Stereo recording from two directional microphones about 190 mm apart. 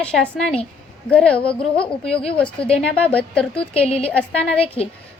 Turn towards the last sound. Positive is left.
turn(degrees=30)  # may be behind; listen again after turning